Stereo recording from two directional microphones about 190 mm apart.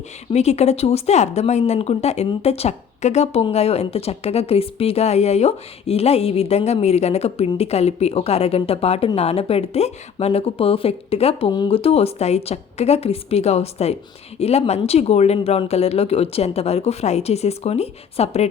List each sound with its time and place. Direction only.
0.3 s a woman's voice: 35° left (ahead or behind)